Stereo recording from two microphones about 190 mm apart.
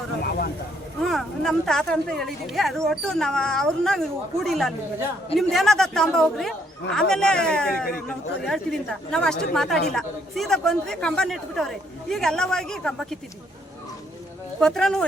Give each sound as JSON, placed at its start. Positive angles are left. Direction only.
{"t": 0.2, "sound": "vehicle", "side_deg": 50}
{"t": 0.9, "sound": "speech", "side_deg": 0}
{"t": 14.6, "sound": "speech", "side_deg": 5}